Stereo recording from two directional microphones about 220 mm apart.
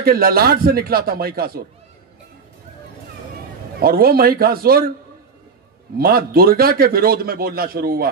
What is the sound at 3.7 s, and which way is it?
Speech, 45° right (ahead or behind).